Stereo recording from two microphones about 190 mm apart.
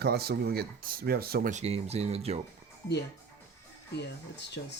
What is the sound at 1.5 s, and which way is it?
Speech, 35° right (ahead or behind).